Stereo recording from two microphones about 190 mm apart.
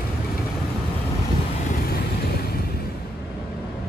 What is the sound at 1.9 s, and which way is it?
Vehicle, 55° left (ahead or behind).